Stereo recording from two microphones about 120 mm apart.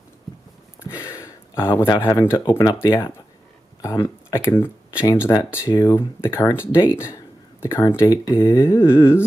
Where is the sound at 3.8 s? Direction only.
25° left (ahead or behind).